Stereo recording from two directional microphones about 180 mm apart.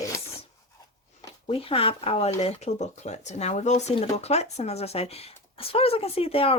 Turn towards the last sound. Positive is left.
turn(degrees=30)  # may be behind; listen again after turning